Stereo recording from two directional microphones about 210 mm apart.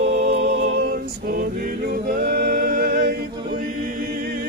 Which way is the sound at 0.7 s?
45° right (ahead or behind).